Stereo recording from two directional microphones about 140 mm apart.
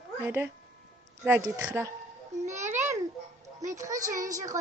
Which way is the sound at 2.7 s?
20° right (ahead or behind).